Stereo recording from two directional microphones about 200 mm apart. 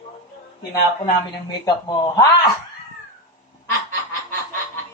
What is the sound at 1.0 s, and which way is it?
A man's voice, 20° left (ahead or behind).